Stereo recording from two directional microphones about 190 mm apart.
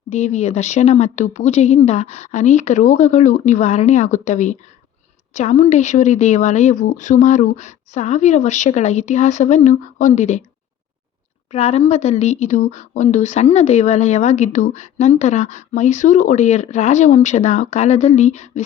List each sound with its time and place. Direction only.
0.1 s speech: 35° left (ahead or behind)
11.5 s speech: 35° left (ahead or behind)